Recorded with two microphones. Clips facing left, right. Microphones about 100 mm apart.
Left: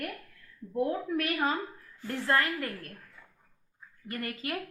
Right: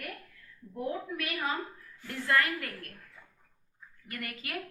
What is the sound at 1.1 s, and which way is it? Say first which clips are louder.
Speech: left 6 dB; 45° left (ahead or behind).